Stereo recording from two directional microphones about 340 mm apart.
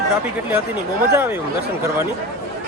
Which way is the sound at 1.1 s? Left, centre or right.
Centre.